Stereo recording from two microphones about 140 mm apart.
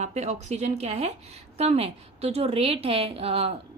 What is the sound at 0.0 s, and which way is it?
A woman's voice, 55° right (ahead or behind).